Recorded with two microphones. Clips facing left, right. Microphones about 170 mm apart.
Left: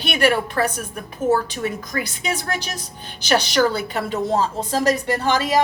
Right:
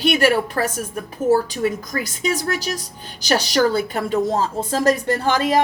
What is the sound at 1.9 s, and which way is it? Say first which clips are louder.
A woman's voice: right 3 dB; 40° right (ahead or behind).